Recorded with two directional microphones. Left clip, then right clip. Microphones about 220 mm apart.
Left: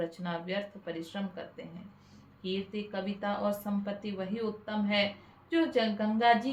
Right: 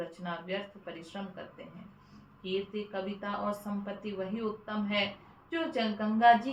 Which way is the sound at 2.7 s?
50° left (ahead or behind).